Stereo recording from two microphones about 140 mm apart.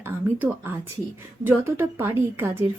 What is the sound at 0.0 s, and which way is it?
A woman's voice, 15° right (ahead or behind).